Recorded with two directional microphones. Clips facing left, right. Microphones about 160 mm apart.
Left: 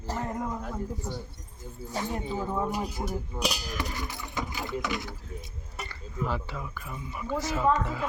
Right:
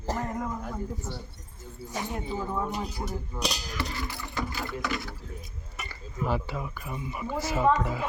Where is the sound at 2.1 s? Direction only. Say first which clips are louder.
Even; 15° left (ahead or behind).